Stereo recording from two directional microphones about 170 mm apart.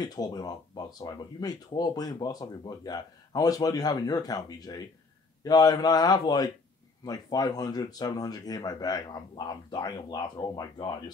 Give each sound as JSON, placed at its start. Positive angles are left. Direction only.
{"t": 0.0, "sound": "speech", "side_deg": 25}